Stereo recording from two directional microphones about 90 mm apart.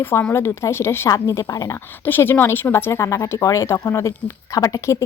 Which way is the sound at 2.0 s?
25° left (ahead or behind).